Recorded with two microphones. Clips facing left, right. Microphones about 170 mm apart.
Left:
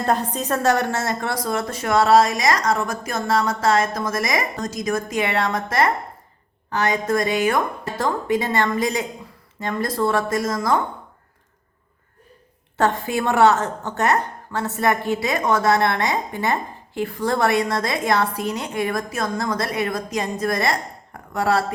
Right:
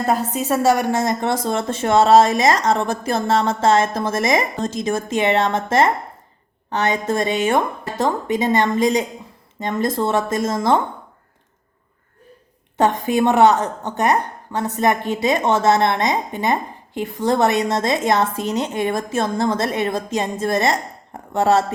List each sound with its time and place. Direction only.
0.0 s a woman's voice: 5° right (ahead or behind); by 10.8 s 25° right (ahead or behind)
12.7 s a woman's voice: 20° right (ahead or behind)